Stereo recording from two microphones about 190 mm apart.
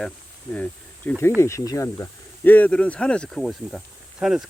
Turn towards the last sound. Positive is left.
turn(degrees=-5)  # may be behind; listen again after turning